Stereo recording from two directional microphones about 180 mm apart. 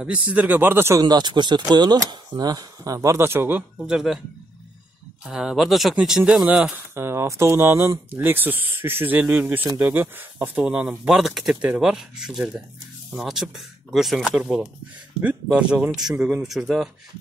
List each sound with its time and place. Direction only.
0.0 s speech: 5° right (ahead or behind)
5.2 s speech: 5° right (ahead or behind)